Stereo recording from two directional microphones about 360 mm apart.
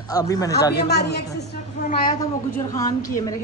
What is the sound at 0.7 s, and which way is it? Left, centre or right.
Speech, left.